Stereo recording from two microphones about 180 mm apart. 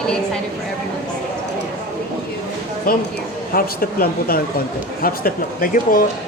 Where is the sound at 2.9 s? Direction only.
55° left (ahead or behind).